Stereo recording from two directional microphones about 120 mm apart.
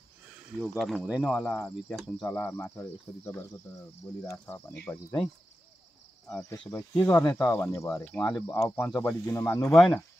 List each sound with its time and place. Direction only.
0.6 s speech: centre (ahead or behind)
1.0 s speech: 10° right (ahead or behind)
1.9 s speech: centre (ahead or behind)
2.2 s speech: 15° left (ahead or behind)
2.7 s cricket: 20° left (ahead or behind)
4.8 s speech: 5° left (ahead or behind)
6.7 s cricket: 25° left (ahead or behind)
8.0 s speech: 10° left (ahead or behind)
8.5 s cricket: 20° left (ahead or behind)
8.9 s speech: 10° left (ahead or behind)
9.3 s cricket: 25° left (ahead or behind)